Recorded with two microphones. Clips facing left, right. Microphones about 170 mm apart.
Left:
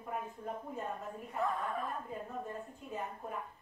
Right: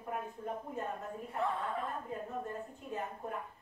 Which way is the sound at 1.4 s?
25° right (ahead or behind).